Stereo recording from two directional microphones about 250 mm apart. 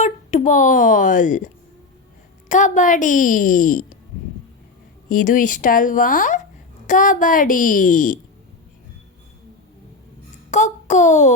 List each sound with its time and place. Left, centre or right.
0.0 s speech: left
2.5 s a woman's voice: left
5.0 s a woman's voice: left
10.5 s a child's voice: left